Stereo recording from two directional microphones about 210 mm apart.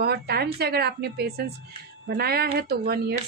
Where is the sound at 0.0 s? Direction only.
50° right (ahead or behind).